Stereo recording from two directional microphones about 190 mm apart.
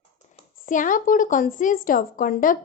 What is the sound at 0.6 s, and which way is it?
A woman's voice, 45° left (ahead or behind).